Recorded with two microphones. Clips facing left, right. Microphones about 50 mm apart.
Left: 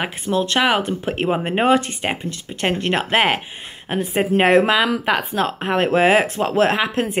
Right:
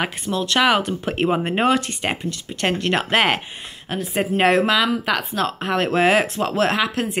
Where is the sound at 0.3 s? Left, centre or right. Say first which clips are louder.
Left 2 dB; left.